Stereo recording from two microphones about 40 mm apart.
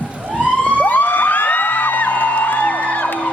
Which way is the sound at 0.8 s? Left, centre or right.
Left.